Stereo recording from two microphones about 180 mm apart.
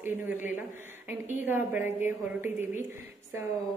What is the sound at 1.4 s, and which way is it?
A woman's voice, 10° right (ahead or behind).